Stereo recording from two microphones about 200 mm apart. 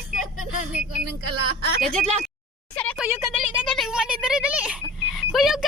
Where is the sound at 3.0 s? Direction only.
5° right (ahead or behind).